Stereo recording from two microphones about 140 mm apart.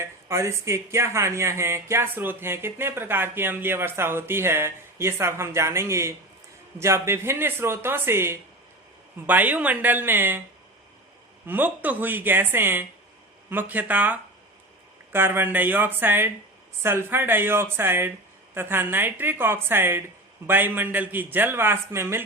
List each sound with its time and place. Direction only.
0.0 s speech: 20° right (ahead or behind)
11.4 s speech: 15° right (ahead or behind)